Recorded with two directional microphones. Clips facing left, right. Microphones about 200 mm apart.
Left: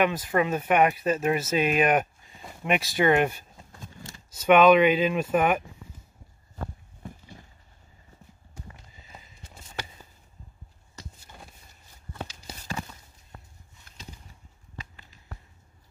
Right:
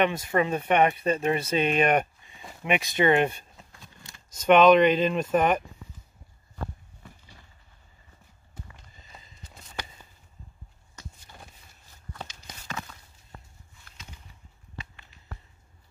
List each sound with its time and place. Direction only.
0.0 s speech: 5° left (ahead or behind)
3.7 s a sound: 45° left (ahead or behind)
4.3 s speech: 5° left (ahead or behind)
7.0 s a sound: 45° left (ahead or behind)
8.7 s horse: 10° left (ahead or behind)
12.1 s walk: 10° left (ahead or behind)